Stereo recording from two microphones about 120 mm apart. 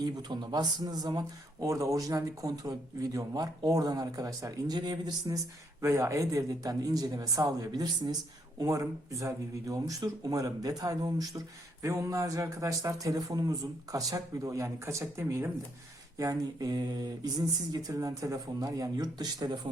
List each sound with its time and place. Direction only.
0.0 s speech: 35° right (ahead or behind)
5.8 s speech: 25° right (ahead or behind)